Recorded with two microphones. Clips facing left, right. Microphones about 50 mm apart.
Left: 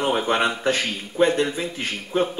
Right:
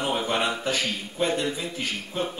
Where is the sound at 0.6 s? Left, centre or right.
Left.